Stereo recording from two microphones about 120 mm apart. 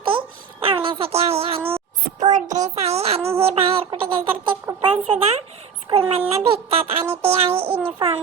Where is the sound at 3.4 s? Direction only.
55° right (ahead or behind).